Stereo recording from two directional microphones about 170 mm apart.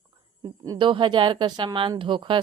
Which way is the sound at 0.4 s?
25° right (ahead or behind).